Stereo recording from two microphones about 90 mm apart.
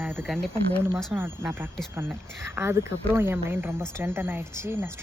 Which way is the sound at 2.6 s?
30° right (ahead or behind).